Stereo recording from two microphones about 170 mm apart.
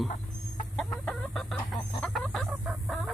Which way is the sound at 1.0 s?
Centre (ahead or behind).